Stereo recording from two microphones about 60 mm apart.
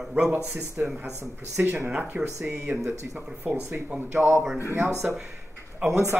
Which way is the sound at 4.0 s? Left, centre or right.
Right.